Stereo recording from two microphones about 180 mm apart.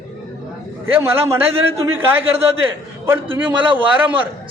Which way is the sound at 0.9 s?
10° right (ahead or behind).